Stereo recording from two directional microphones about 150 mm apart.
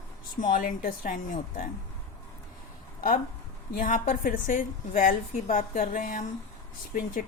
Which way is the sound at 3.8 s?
60° left (ahead or behind).